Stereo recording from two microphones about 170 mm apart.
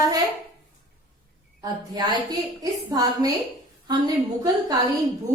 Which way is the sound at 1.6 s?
25° right (ahead or behind).